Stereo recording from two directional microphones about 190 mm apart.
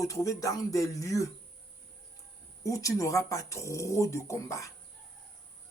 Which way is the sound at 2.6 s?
15° left (ahead or behind).